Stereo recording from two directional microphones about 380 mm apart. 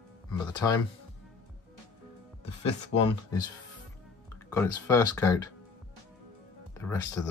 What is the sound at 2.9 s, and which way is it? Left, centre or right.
Speech, left.